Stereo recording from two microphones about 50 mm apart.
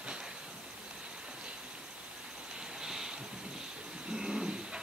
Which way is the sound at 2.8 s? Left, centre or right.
Centre.